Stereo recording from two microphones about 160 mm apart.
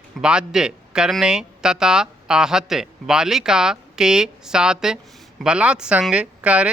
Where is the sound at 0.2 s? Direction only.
5° right (ahead or behind).